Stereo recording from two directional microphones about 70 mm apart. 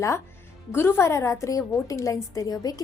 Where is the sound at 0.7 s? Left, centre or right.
Left.